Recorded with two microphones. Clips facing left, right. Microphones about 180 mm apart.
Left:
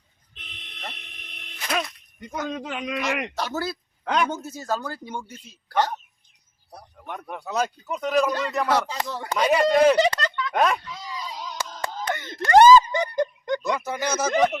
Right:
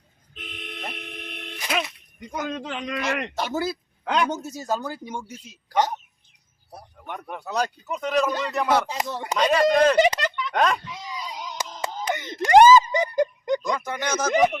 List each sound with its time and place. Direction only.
0.3 s vehicle: 50° right (ahead or behind)
0.9 s a sound: 55° right (ahead or behind)
1.6 s speech: 5° right (ahead or behind)
3.3 s speech: 20° right (ahead or behind)
3.7 s speech: centre (ahead or behind)
4.3 s speech: 15° right (ahead or behind)
6.9 s a man's voice: centre (ahead or behind)
8.9 s speech: 20° right (ahead or behind)
9.3 s speech: 10° left (ahead or behind)
10.0 s a sound: 15° right (ahead or behind)
10.5 s a man's voice: 5° left (ahead or behind)
10.8 s a sound: 15° right (ahead or behind)
13.6 s speech: 10° left (ahead or behind)
14.3 s speech: 10° right (ahead or behind)